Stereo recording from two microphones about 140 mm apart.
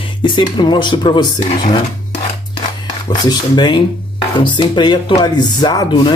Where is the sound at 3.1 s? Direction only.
30° left (ahead or behind).